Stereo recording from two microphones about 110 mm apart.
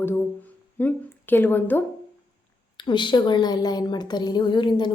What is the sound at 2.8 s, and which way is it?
A woman's voice, 45° left (ahead or behind).